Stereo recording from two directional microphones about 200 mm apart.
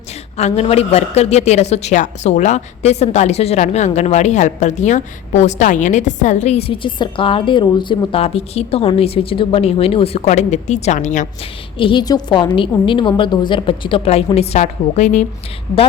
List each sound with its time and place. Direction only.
0.3 s a woman's voice: 30° left (ahead or behind)
11.8 s a woman's voice: 25° left (ahead or behind)